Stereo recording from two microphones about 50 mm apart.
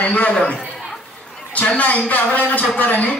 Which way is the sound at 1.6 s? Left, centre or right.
Left.